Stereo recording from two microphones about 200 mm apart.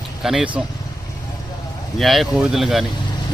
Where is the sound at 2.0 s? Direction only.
Centre (ahead or behind).